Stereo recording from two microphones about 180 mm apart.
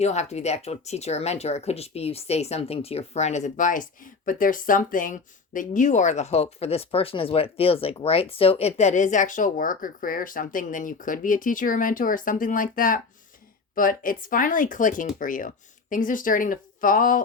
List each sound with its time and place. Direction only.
0.0 s speech: 40° left (ahead or behind)